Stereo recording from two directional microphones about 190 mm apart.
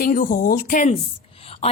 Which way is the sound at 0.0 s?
45° left (ahead or behind).